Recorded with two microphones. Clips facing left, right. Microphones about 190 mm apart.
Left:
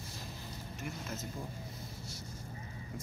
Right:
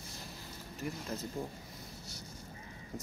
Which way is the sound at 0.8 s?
35° right (ahead or behind).